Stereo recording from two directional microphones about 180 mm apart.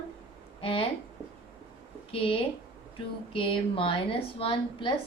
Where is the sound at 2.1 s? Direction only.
30° left (ahead or behind).